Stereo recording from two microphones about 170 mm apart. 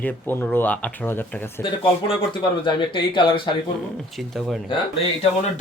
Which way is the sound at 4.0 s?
Centre (ahead or behind).